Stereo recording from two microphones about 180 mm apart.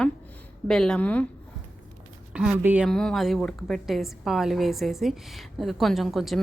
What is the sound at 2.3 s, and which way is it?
Speech, 5° right (ahead or behind).